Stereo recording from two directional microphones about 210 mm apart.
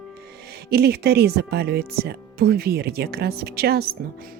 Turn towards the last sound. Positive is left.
turn(degrees=-45)  # may be behind; listen again after turning